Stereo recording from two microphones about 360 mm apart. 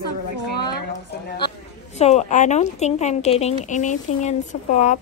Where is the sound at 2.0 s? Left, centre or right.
Centre.